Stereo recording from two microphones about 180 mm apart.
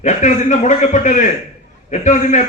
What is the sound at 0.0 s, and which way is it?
A man's voice, 40° left (ahead or behind).